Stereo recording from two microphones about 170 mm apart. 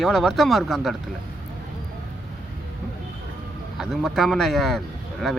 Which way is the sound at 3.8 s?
Centre (ahead or behind).